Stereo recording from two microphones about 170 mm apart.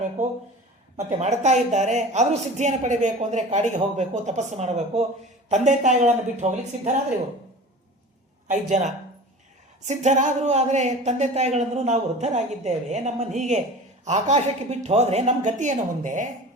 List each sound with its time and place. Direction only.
0.2 s a woman's voice: 45° right (ahead or behind)
8.4 s a woman's voice: 45° right (ahead or behind)